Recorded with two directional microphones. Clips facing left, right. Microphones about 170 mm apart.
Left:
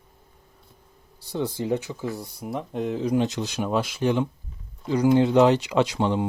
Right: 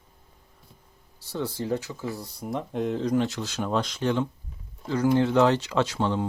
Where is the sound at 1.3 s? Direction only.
15° left (ahead or behind).